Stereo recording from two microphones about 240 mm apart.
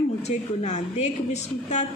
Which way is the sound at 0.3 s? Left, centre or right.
Left.